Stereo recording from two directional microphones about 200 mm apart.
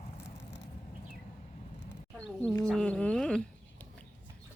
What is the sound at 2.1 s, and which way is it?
Speech, 5° left (ahead or behind).